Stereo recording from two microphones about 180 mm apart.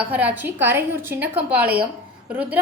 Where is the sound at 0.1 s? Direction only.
10° right (ahead or behind).